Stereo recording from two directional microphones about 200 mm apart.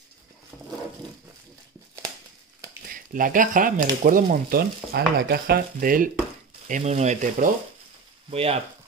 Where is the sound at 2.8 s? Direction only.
45° right (ahead or behind).